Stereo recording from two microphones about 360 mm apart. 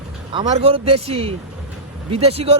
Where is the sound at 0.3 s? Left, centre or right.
Centre.